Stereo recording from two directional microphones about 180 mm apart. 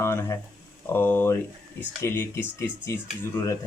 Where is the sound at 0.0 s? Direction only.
15° left (ahead or behind).